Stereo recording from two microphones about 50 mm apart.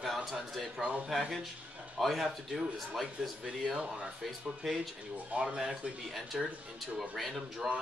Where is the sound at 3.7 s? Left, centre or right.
Right.